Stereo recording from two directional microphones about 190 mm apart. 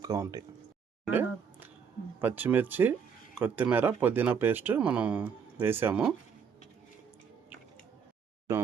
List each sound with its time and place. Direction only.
0.0 s speech: 20° right (ahead or behind)
1.0 s music: 10° right (ahead or behind)
2.2 s speech: 10° right (ahead or behind)